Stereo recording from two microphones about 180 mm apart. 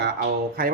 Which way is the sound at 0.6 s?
55° right (ahead or behind).